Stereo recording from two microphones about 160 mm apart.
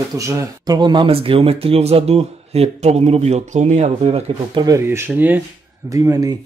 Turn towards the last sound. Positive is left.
turn(degrees=-20)  # may be behind; listen again after turning